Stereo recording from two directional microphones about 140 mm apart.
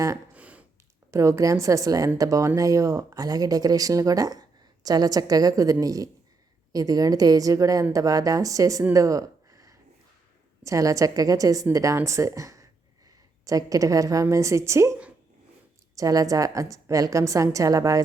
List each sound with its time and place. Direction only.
0.3 s a sound: 10° right (ahead or behind)
1.1 s a woman's voice: 20° right (ahead or behind)
16.0 s speech: 25° right (ahead or behind)